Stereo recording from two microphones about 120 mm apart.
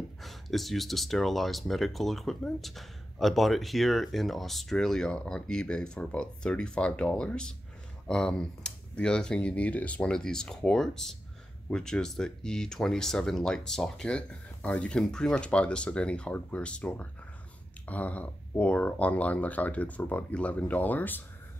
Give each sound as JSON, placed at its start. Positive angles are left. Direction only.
{"t": 0.2, "sound": "speech", "side_deg": 0}